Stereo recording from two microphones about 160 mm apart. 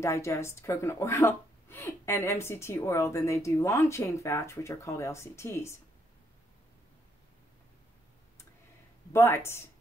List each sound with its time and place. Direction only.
0.0 s a woman's voice: 20° left (ahead or behind)
9.1 s a woman's voice: 15° left (ahead or behind)